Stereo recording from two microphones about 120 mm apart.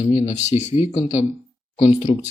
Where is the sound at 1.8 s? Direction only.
50° left (ahead or behind).